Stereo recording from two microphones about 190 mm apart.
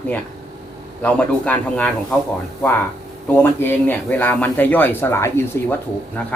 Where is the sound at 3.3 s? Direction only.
10° left (ahead or behind).